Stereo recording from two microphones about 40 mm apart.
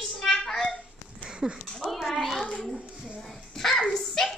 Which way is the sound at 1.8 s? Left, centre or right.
Centre.